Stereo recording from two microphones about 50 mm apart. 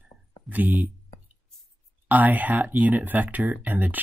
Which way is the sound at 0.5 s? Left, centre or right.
Right.